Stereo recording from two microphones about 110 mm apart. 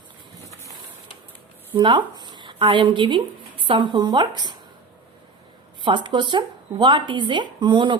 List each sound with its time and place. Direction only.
1.7 s speech: 45° right (ahead or behind)
5.8 s speech: 45° right (ahead or behind)